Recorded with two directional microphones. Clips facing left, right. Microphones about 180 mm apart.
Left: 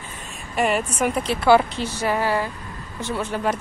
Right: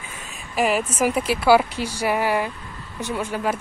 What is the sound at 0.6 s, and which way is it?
A woman's voice, centre (ahead or behind).